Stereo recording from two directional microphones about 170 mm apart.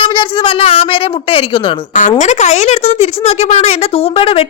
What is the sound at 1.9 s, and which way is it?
A woman's voice, 50° left (ahead or behind).